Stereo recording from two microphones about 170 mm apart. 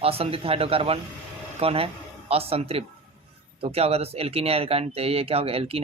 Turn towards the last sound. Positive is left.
turn(degrees=-35)  # may be behind; listen again after turning